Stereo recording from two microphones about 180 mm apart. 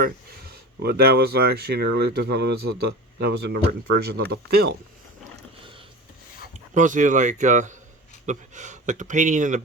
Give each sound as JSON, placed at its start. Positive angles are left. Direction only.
{"t": 0.0, "sound": "speech", "side_deg": -60}
{"t": 6.5, "sound": "speech", "side_deg": -45}